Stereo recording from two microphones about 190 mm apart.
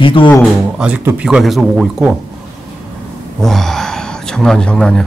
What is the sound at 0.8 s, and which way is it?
Speech, 5° right (ahead or behind).